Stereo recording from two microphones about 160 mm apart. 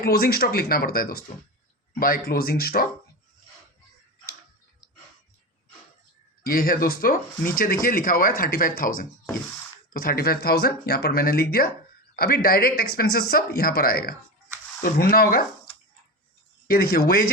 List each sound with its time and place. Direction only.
0.0 s speech: 70° left (ahead or behind)
6.4 s speech: 65° left (ahead or behind)
16.6 s speech: 70° left (ahead or behind)